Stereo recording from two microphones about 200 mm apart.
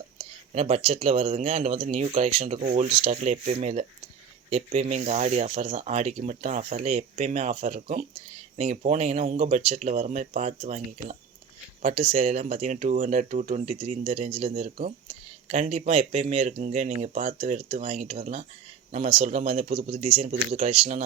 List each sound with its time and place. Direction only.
0.5 s speech: 30° right (ahead or behind)